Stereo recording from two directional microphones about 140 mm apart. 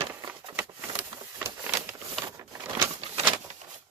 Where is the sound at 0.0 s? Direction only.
15° right (ahead or behind).